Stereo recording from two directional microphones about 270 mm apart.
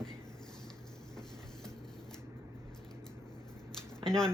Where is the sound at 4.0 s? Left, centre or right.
Centre.